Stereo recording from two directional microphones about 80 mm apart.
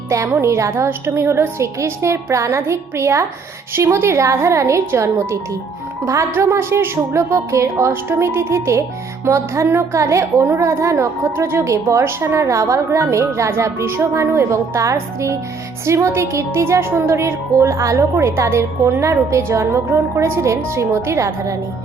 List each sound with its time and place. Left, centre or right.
0.1 s speech: right